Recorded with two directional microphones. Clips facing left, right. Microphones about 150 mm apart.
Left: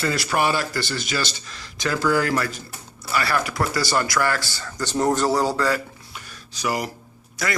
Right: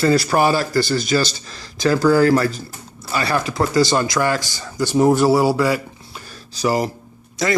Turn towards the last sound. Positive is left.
turn(degrees=-25)  # may be behind; listen again after turning